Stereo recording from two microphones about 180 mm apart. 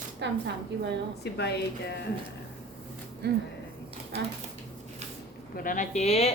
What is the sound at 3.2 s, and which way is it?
Speech, 65° right (ahead or behind).